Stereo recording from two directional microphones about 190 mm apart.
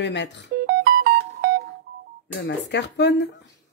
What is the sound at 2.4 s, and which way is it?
Speech, 65° left (ahead or behind).